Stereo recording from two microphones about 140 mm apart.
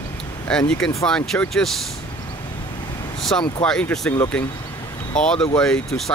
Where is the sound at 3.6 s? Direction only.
5° left (ahead or behind).